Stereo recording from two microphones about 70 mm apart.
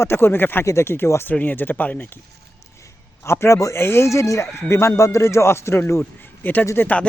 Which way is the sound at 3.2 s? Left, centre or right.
Left.